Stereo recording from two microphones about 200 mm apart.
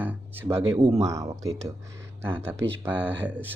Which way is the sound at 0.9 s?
15° right (ahead or behind).